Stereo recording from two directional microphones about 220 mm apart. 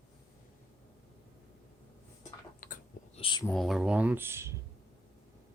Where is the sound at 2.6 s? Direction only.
40° left (ahead or behind).